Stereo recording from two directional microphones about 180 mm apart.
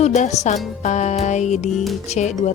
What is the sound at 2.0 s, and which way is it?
Speech, 40° left (ahead or behind).